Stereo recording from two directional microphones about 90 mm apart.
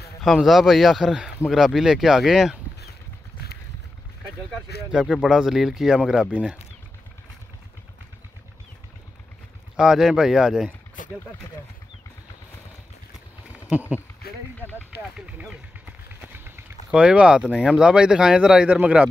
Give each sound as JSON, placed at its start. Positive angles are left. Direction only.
{"t": 0.2, "sound": "speech", "side_deg": 0}
{"t": 4.9, "sound": "speech", "side_deg": 0}
{"t": 9.8, "sound": "speech", "side_deg": -5}
{"t": 13.7, "sound": "speech", "side_deg": -15}
{"t": 14.6, "sound": "speech", "side_deg": 20}
{"t": 16.3, "sound": "typing", "side_deg": -25}
{"t": 16.9, "sound": "speech", "side_deg": -15}